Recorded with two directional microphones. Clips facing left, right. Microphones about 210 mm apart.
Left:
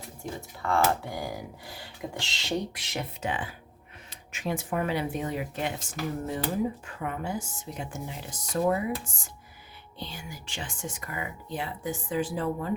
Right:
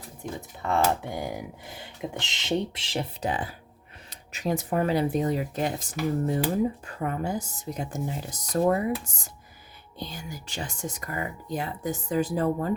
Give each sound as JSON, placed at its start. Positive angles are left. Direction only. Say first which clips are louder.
{"t": 0.2, "sound": "speech", "louder": "right 2 dB", "side_deg": -20}